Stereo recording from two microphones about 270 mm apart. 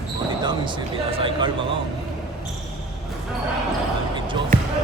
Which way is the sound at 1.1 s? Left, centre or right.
Centre.